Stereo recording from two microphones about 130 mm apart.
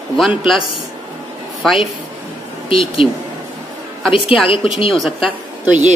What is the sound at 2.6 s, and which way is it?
Speech, 45° left (ahead or behind).